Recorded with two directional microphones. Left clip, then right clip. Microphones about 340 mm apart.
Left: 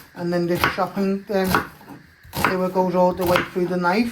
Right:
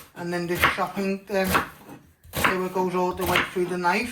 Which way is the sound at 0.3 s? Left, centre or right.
Left.